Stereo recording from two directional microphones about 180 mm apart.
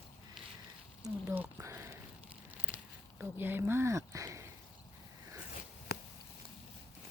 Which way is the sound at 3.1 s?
10° right (ahead or behind).